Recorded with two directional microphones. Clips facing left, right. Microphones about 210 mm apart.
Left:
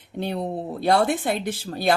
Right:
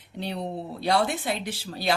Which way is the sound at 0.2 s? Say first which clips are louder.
Left 4 dB; 50° left (ahead or behind).